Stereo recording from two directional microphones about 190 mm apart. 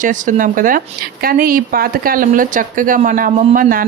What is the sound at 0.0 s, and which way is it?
Speech, 45° right (ahead or behind).